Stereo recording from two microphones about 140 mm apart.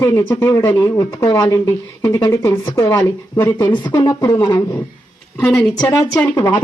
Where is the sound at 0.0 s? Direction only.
20° left (ahead or behind).